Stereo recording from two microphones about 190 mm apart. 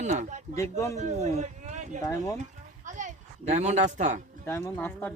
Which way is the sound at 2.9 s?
40° right (ahead or behind).